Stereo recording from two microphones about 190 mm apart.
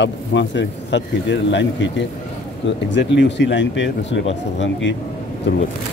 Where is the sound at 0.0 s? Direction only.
70° left (ahead or behind).